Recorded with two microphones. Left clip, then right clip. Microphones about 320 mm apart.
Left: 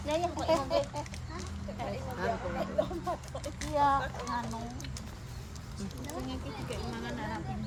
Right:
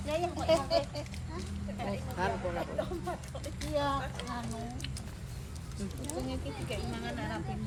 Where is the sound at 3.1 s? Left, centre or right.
Centre.